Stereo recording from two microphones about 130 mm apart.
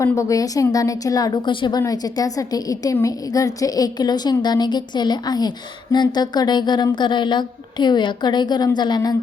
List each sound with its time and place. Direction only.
0.0 s a woman's voice: 25° left (ahead or behind)